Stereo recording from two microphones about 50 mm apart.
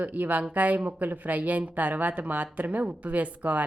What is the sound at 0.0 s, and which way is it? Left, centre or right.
Speech, right.